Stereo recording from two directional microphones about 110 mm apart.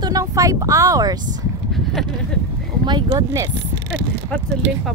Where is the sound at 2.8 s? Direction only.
45° right (ahead or behind).